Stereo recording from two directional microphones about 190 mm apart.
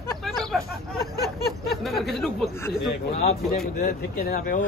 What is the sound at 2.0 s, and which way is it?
Speech, centre (ahead or behind).